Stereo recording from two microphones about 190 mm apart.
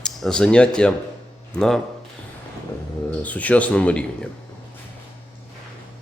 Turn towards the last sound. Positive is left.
turn(degrees=5)  # may be behind; listen again after turning